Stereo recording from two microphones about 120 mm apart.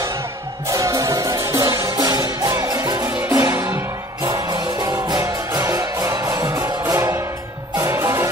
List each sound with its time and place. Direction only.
0.7 s music: 30° right (ahead or behind)